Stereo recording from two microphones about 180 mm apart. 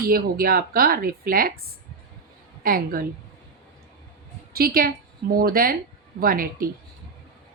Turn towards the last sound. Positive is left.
turn(degrees=-50)  # may be behind; listen again after turning